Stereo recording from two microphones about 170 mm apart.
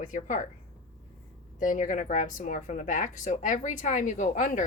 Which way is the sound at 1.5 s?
50° left (ahead or behind).